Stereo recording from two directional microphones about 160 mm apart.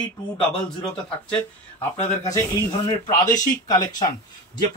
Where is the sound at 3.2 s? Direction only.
25° left (ahead or behind).